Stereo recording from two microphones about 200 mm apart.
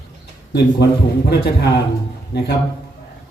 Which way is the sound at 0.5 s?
55° left (ahead or behind).